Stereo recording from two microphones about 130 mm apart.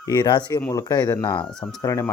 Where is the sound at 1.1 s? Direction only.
20° left (ahead or behind).